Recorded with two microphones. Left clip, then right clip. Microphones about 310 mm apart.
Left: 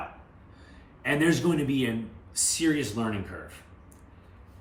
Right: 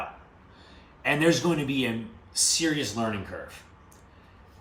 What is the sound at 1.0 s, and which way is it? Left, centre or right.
Speech, centre.